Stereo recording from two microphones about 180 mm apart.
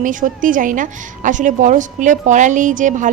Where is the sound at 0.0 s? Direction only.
45° right (ahead or behind).